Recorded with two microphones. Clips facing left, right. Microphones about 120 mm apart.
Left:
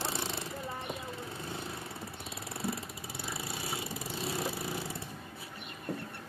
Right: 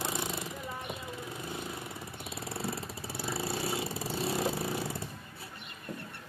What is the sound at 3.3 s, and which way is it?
Vehicle, 35° right (ahead or behind).